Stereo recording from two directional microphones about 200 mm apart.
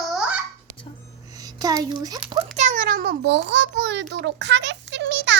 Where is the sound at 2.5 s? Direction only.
40° right (ahead or behind).